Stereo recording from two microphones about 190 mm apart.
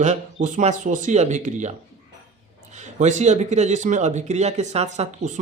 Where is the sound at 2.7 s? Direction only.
40° right (ahead or behind).